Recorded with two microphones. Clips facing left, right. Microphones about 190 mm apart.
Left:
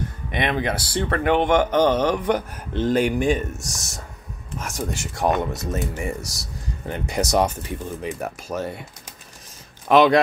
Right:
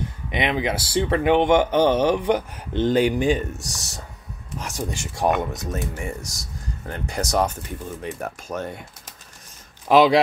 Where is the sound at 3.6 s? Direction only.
35° right (ahead or behind).